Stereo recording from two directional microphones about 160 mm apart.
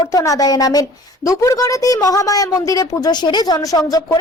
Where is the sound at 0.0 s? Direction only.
20° left (ahead or behind).